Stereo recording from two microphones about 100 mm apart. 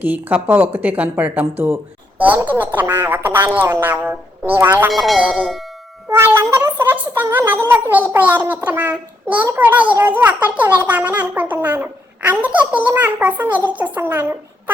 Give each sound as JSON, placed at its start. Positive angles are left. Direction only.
{"t": 0.0, "sound": "speech", "side_deg": -15}
{"t": 4.9, "sound": "tubular bells", "side_deg": 0}
{"t": 6.1, "sound": "a woman's voice", "side_deg": -25}